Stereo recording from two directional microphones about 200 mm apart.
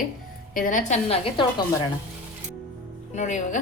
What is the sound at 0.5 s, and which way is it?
Speech, 45° left (ahead or behind).